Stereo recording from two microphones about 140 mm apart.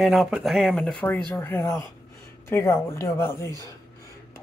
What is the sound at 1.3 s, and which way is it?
Speech, 15° left (ahead or behind).